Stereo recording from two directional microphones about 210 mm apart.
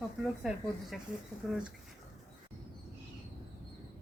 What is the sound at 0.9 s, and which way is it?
Speech, centre (ahead or behind).